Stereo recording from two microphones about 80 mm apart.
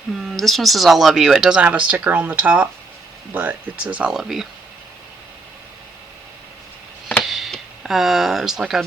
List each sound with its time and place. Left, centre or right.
0.3 s speech: centre
4.1 s speech: centre
7.2 s a sound: centre